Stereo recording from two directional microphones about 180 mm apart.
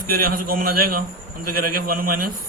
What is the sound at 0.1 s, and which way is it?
A man's voice, 55° right (ahead or behind).